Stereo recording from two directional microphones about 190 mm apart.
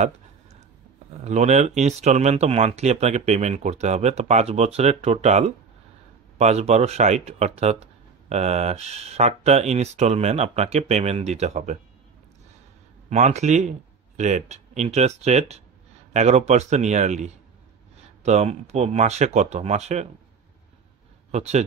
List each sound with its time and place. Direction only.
1.2 s speech: 35° right (ahead or behind)
13.1 s speech: 35° right (ahead or behind)
21.3 s speech: 35° right (ahead or behind)